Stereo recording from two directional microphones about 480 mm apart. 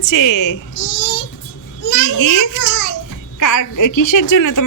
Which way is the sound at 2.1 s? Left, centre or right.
Left.